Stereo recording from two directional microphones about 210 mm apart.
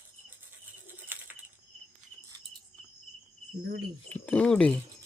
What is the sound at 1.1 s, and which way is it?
Bird, 10° right (ahead or behind).